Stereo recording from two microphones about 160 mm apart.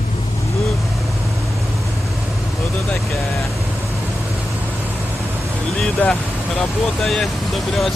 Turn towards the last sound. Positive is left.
turn(degrees=0)  # may be behind; listen again after turning